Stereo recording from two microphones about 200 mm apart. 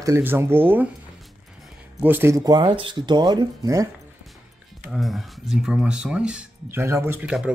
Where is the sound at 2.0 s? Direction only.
10° right (ahead or behind).